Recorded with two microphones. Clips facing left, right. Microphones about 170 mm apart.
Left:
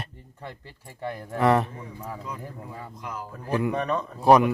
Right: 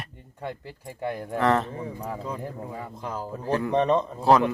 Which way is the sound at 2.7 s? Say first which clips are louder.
Right 3 dB; 20° right (ahead or behind).